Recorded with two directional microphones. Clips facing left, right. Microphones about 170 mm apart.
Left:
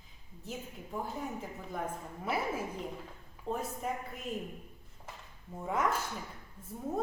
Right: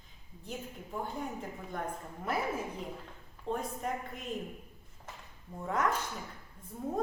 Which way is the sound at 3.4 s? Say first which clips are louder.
Right 1 dB; 5° left (ahead or behind).